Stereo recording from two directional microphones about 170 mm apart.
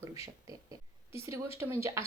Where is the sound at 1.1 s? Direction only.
20° right (ahead or behind).